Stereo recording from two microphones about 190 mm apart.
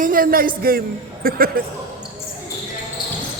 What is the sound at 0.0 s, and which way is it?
Speech, 45° right (ahead or behind).